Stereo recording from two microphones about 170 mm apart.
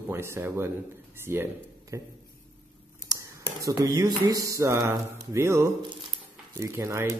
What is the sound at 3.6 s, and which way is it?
Speech, 20° right (ahead or behind).